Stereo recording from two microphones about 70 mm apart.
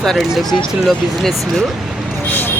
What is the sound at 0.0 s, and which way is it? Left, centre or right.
Speech, centre.